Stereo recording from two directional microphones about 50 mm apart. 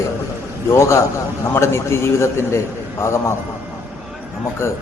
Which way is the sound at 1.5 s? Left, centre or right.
Left.